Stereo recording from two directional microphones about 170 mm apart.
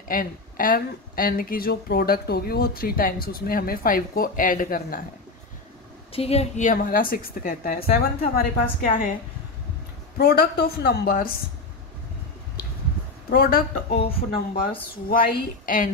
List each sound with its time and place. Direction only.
0.1 s speech: 55° left (ahead or behind)
6.1 s speech: 35° left (ahead or behind); by 9.1 s 60° left (ahead or behind)
10.1 s speech: 65° left (ahead or behind)
13.3 s speech: 60° left (ahead or behind)
14.0 s speech: 35° left (ahead or behind)
15.6 s a woman's voice: 55° left (ahead or behind)